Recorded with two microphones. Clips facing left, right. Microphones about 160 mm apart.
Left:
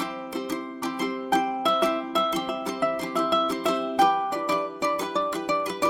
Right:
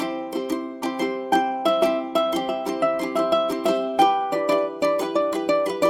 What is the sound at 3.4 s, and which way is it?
Music, 20° right (ahead or behind).